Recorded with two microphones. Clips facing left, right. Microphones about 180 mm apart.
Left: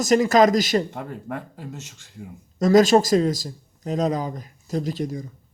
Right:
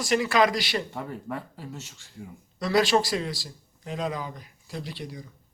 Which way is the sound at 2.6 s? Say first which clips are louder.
Left 7 dB; 45° left (ahead or behind).